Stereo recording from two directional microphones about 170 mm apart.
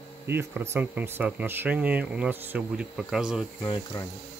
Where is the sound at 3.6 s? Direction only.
25° left (ahead or behind).